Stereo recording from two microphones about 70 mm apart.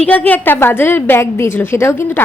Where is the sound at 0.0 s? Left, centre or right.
Left.